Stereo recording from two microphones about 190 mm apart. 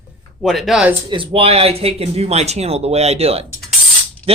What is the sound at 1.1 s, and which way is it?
Speech, 30° right (ahead or behind).